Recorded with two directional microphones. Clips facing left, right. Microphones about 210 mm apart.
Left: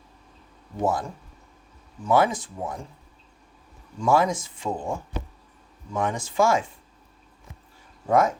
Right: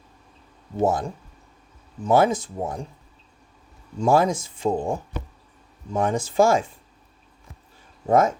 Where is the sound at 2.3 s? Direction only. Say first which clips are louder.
Right 5 dB; 25° right (ahead or behind).